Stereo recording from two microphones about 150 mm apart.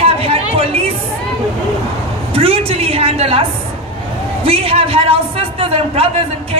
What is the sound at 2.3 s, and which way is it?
A man's voice, 40° right (ahead or behind).